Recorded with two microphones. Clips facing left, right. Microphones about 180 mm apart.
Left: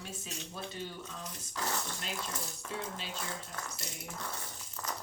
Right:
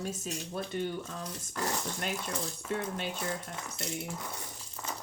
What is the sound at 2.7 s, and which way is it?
Speech, 60° right (ahead or behind).